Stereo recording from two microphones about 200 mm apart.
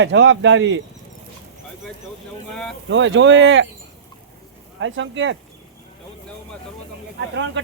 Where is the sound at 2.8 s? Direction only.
70° right (ahead or behind).